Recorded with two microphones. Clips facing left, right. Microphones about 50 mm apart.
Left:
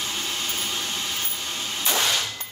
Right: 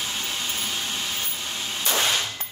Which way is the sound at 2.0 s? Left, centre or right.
Centre.